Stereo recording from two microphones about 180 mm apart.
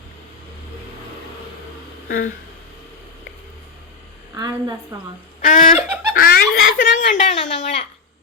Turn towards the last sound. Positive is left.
turn(degrees=40)  # may be behind; listen again after turning